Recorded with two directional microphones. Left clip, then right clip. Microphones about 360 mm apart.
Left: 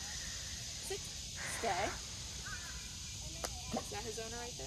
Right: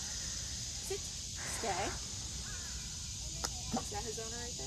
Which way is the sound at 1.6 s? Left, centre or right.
Centre.